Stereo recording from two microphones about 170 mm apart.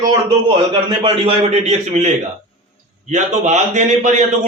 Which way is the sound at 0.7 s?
35° right (ahead or behind).